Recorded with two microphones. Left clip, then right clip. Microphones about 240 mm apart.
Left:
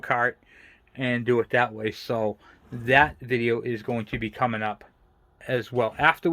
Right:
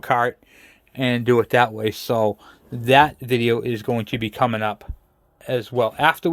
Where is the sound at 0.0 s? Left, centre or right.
Right.